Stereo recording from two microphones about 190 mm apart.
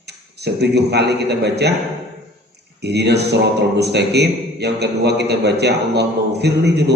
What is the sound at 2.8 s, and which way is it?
A man's voice, 60° right (ahead or behind).